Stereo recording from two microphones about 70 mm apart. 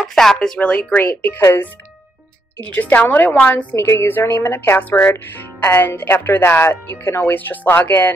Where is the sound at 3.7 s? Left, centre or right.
Left.